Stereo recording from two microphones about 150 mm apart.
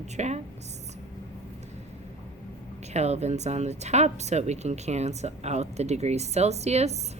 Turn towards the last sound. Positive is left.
turn(degrees=-45)  # may be behind; listen again after turning